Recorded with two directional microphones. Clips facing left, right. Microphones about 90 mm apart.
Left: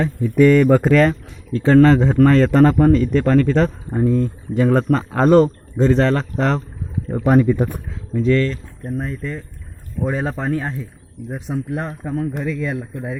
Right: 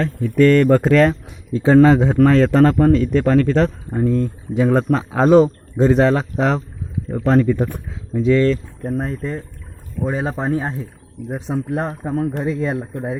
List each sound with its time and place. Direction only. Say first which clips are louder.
0.0 s a man's voice: even; 10° left (ahead or behind); by 6.6 s 5° right (ahead or behind)
7.3 s speech: left 1 dB; 10° left (ahead or behind)
8.1 s speech: right 1 dB; 10° right (ahead or behind)
9.0 s speech: right 1 dB; 35° right (ahead or behind)
10.1 s a man's voice: right 1 dB; 5° right (ahead or behind)
10.4 s speech: right 1 dB; 20° right (ahead or behind); by 13.1 s 35° right (ahead or behind)